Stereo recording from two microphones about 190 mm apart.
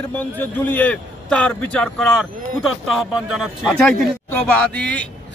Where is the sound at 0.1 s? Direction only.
10° left (ahead or behind).